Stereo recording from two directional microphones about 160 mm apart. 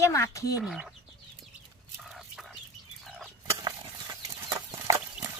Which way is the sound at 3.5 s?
25° right (ahead or behind).